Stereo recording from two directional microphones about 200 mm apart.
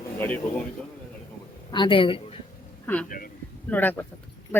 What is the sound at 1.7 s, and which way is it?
Speech, 25° left (ahead or behind).